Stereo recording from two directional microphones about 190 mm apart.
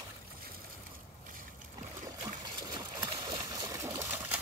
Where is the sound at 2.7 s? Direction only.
20° right (ahead or behind).